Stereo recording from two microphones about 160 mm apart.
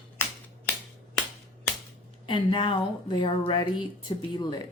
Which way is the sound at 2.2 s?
30° left (ahead or behind).